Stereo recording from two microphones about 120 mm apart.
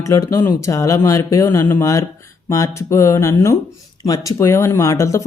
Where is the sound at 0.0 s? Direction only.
25° left (ahead or behind).